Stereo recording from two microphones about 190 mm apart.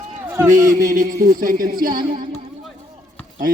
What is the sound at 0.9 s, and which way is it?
A man's voice, 45° right (ahead or behind).